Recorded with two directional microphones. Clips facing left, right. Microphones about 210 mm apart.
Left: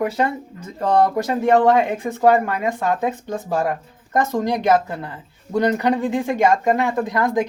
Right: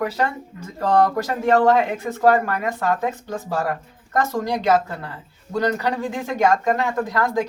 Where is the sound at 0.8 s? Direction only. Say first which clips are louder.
Left 1 dB; 20° left (ahead or behind).